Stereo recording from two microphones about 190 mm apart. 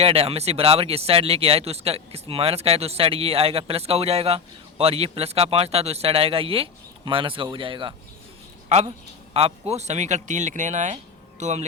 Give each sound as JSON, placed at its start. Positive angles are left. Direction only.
{"t": 0.0, "sound": "speech", "side_deg": -30}
{"t": 9.3, "sound": "speech", "side_deg": -35}